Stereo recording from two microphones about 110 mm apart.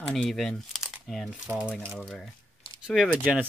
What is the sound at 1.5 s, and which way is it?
Speech, 10° right (ahead or behind).